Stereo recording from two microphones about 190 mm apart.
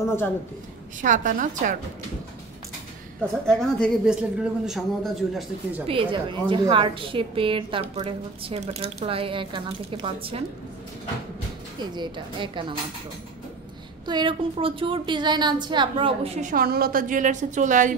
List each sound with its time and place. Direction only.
0.0 s a man's voice: 15° left (ahead or behind)
1.0 s a woman's voice: 45° right (ahead or behind)
3.4 s speech: 5° left (ahead or behind)
5.9 s speech: 25° right (ahead or behind)
11.8 s speech: 25° right (ahead or behind)
14.0 s speech: 25° right (ahead or behind)
16.3 s a woman's voice: 45° right (ahead or behind)